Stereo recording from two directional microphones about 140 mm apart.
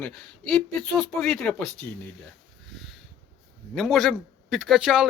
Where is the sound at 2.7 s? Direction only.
Centre (ahead or behind).